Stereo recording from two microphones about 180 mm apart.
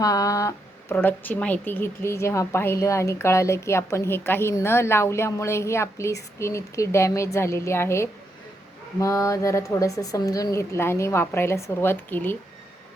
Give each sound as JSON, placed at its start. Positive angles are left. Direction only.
{"t": 0.0, "sound": "speech", "side_deg": 20}